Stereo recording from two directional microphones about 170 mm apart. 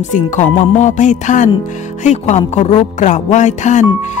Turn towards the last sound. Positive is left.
turn(degrees=45)  # may be behind; listen again after turning